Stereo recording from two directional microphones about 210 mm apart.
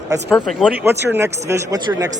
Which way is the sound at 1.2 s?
15° right (ahead or behind).